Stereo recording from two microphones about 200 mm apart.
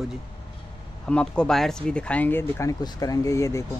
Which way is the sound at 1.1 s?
5° left (ahead or behind).